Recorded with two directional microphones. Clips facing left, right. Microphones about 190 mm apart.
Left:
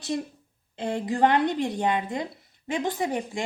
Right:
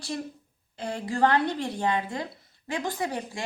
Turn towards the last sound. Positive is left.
turn(degrees=20)  # may be behind; listen again after turning